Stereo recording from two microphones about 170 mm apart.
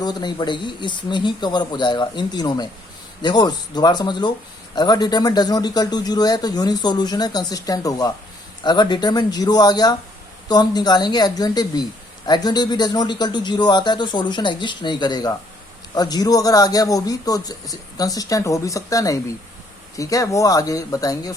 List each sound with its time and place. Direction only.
0.0 s a woman's voice: 25° left (ahead or behind)